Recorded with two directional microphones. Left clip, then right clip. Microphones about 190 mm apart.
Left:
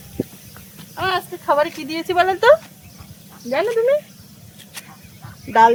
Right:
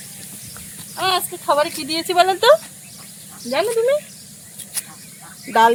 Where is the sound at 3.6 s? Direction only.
5° right (ahead or behind).